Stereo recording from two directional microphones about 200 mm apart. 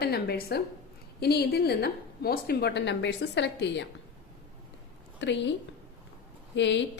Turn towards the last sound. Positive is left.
turn(degrees=65)  # may be behind; listen again after turning